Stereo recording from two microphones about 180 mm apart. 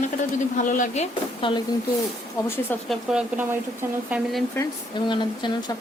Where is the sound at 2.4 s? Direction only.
10° left (ahead or behind).